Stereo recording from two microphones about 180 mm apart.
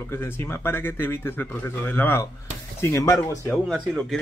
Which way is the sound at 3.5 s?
Centre (ahead or behind).